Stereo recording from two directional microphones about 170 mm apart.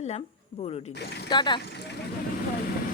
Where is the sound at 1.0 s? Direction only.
75° left (ahead or behind).